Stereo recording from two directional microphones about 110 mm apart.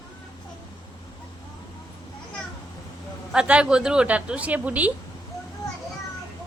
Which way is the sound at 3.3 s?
10° right (ahead or behind).